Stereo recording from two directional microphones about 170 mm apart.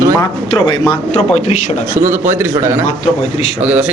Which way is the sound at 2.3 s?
15° right (ahead or behind).